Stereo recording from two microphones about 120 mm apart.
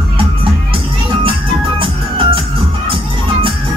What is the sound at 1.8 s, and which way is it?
Music, 45° right (ahead or behind).